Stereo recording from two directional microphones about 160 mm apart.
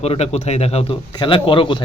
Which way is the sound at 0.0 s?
40° left (ahead or behind).